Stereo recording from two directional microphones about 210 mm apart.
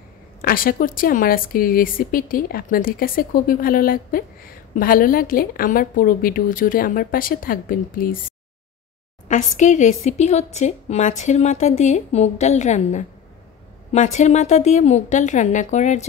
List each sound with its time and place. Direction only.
0.4 s a woman's voice: 45° left (ahead or behind)
9.3 s a woman's voice: 35° left (ahead or behind)